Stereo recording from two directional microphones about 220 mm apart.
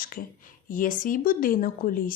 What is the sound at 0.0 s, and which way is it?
Speech, 40° left (ahead or behind).